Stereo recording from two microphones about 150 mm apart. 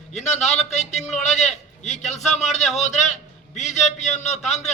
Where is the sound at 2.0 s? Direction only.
50° left (ahead or behind).